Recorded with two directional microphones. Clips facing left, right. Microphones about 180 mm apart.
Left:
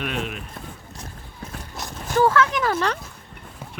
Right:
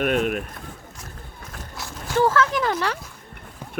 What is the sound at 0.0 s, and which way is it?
Speech, 50° right (ahead or behind).